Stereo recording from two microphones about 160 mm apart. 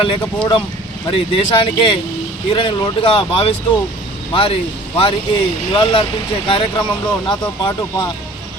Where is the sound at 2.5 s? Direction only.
30° left (ahead or behind).